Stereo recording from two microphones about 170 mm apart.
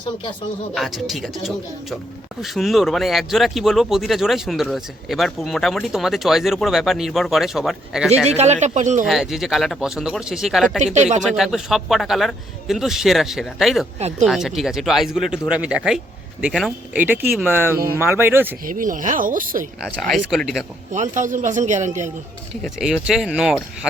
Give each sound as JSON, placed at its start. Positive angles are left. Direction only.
{"t": 0.7, "sound": "speech", "side_deg": 0}
{"t": 2.4, "sound": "speech", "side_deg": 0}
{"t": 8.3, "sound": "a man's voice", "side_deg": -40}
{"t": 9.0, "sound": "speech", "side_deg": 0}
{"t": 10.9, "sound": "a man's voice", "side_deg": -45}
{"t": 11.3, "sound": "speech", "side_deg": 0}
{"t": 17.0, "sound": "speech", "side_deg": -10}
{"t": 18.6, "sound": "a man's voice", "side_deg": -50}
{"t": 19.8, "sound": "speech", "side_deg": 0}
{"t": 20.9, "sound": "a man's voice", "side_deg": -45}
{"t": 22.6, "sound": "speech", "side_deg": -5}